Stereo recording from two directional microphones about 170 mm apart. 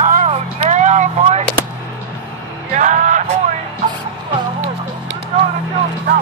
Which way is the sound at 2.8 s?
45° right (ahead or behind).